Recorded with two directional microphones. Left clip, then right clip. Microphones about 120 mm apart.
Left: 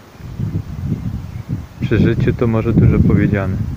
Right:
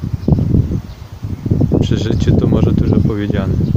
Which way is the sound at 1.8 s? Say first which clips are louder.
Left 2 dB; 5° right (ahead or behind).